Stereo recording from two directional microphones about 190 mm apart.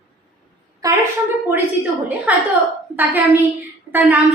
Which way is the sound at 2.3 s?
5° right (ahead or behind).